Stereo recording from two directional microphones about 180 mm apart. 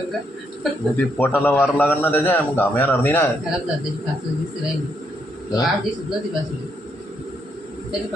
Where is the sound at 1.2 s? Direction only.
10° left (ahead or behind).